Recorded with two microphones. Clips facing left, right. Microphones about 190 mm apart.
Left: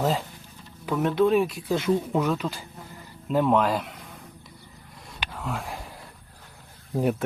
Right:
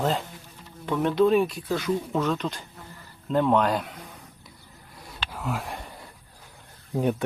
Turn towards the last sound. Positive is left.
turn(degrees=0)  # may be behind; listen again after turning